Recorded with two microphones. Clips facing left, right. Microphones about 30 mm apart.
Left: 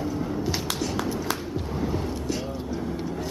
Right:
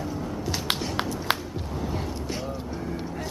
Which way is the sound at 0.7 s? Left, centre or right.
Right.